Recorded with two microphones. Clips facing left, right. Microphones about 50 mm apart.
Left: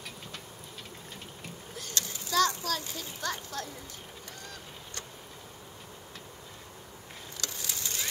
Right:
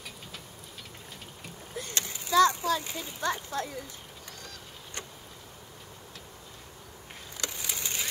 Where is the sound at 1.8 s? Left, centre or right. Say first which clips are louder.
Right 2 dB; right.